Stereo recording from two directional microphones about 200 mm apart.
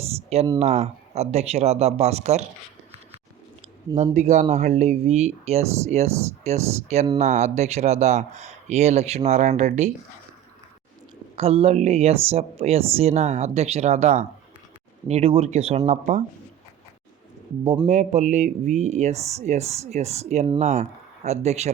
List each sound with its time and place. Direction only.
0.2 s a sound: 30° right (ahead or behind)
0.6 s speech: 30° right (ahead or behind)
3.9 s speech: 35° right (ahead or behind)
11.3 s speech: 30° right (ahead or behind)
17.7 s speech: 30° right (ahead or behind)